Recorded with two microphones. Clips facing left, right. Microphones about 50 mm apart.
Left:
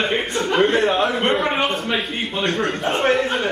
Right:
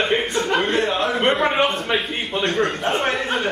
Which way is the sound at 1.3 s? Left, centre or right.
Centre.